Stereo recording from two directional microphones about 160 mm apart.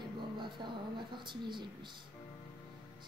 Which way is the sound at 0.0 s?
30° right (ahead or behind).